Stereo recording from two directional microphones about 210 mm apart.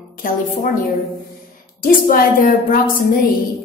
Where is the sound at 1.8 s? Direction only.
40° left (ahead or behind).